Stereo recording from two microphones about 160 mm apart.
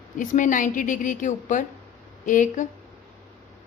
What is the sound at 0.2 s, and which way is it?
A woman's voice, 55° left (ahead or behind).